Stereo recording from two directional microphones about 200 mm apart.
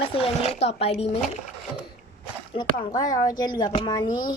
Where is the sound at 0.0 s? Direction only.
30° left (ahead or behind).